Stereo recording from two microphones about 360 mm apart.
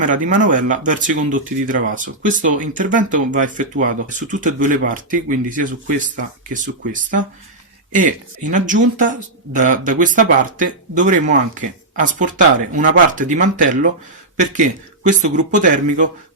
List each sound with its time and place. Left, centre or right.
0.0 s speech: right